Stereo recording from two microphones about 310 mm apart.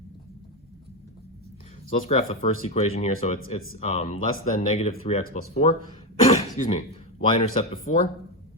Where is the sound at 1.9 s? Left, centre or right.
Left.